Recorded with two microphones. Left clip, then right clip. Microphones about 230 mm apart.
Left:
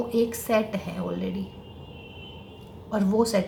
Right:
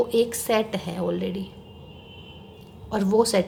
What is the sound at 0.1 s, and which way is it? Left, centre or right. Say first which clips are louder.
A woman's voice: right 2 dB; right.